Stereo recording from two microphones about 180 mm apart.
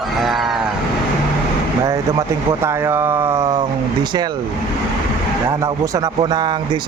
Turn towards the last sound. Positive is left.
turn(degrees=-25)  # may be behind; listen again after turning